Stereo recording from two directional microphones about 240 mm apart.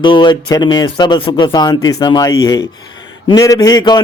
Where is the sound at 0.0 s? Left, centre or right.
Centre.